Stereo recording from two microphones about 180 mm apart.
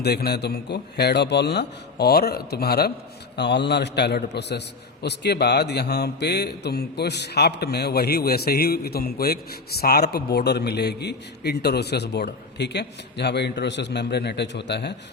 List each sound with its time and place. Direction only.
0.0 s a man's voice: 65° left (ahead or behind)